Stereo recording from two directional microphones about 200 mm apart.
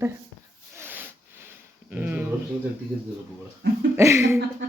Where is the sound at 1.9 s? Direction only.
5° right (ahead or behind).